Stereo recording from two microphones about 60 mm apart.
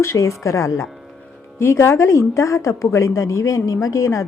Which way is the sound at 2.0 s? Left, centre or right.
Left.